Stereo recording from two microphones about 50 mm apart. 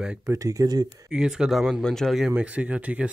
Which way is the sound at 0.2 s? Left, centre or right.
Right.